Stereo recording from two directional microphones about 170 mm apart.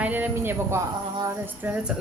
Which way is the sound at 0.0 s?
10° right (ahead or behind).